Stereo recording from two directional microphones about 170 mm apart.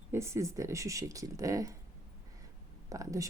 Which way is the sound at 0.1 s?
15° right (ahead or behind).